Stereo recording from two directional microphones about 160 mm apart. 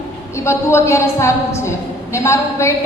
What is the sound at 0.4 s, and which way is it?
A woman's voice, 15° left (ahead or behind).